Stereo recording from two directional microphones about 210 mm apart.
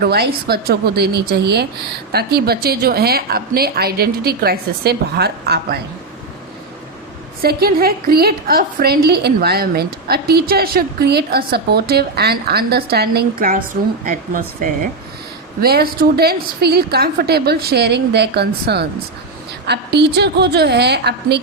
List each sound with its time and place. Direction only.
0.0 s a woman's voice: 50° right (ahead or behind)
7.4 s a woman's voice: 45° right (ahead or behind)